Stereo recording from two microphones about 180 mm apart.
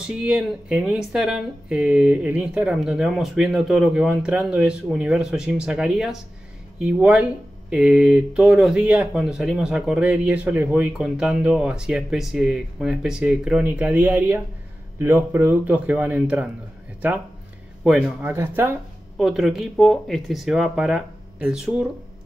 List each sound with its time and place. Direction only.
0.0 s speech: 5° right (ahead or behind)
17.8 s speech: 10° right (ahead or behind)